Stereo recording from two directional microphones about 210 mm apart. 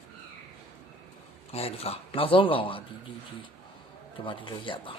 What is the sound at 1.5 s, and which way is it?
A man's voice, 30° left (ahead or behind).